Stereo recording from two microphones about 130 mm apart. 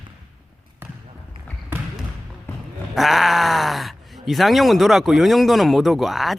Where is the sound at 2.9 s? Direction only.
Centre (ahead or behind).